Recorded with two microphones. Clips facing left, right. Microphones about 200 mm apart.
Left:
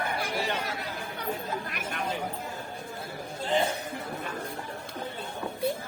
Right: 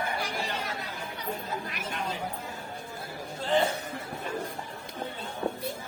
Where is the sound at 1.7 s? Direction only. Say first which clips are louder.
Left 1 dB; 50° left (ahead or behind).